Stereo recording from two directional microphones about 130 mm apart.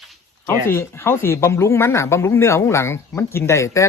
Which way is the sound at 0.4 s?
20° left (ahead or behind).